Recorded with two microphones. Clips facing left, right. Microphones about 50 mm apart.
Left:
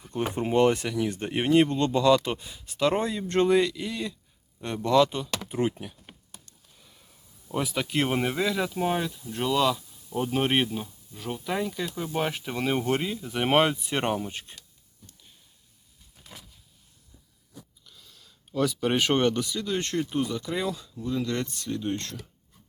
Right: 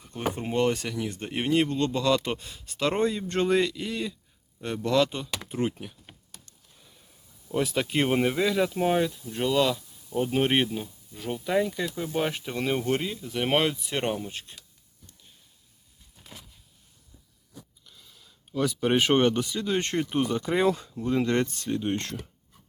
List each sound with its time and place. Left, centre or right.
0.1 s speech: centre
7.5 s speech: centre
17.8 s speech: centre; by 22.2 s right